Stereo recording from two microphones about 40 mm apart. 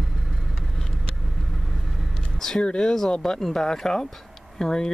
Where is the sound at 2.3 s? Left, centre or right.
Centre.